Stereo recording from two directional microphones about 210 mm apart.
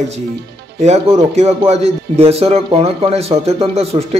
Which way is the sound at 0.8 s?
30° right (ahead or behind).